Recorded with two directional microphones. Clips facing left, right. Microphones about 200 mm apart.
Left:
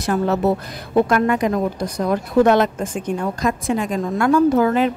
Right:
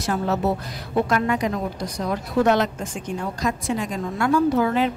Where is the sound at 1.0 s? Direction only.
55° left (ahead or behind).